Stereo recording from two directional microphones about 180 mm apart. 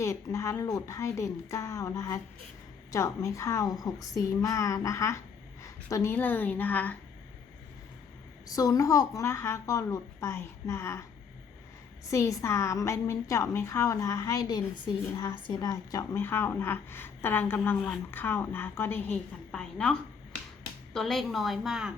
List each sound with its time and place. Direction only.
0.0 s a woman's voice: 15° left (ahead or behind)
8.5 s a woman's voice: 20° left (ahead or behind)
12.1 s a woman's voice: 15° left (ahead or behind); by 21.9 s 5° right (ahead or behind)